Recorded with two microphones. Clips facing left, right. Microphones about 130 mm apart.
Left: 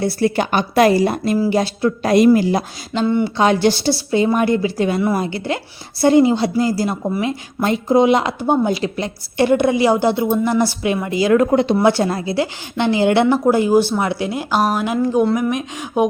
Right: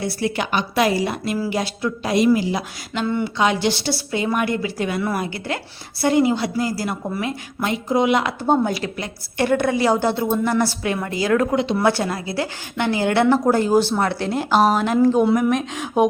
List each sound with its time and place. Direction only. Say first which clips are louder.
0.3 s a woman's voice: left 4 dB; 45° left (ahead or behind)
2.0 s a woman's voice: left 5 dB; 50° left (ahead or behind)
2.9 s a woman's voice: left 5 dB; 25° left (ahead or behind)
3.3 s a woman's voice: left 3 dB; 40° left (ahead or behind); by 7.3 s 20° left (ahead or behind)
7.6 s a woman's voice: left 5 dB; 35° left (ahead or behind); by 11.4 s 20° left (ahead or behind)
11.5 s a woman's voice: left 5 dB; 50° left (ahead or behind)
11.8 s a woman's voice: left 4 dB; 25° left (ahead or behind)
13.2 s a woman's voice: left 2 dB; 10° left (ahead or behind)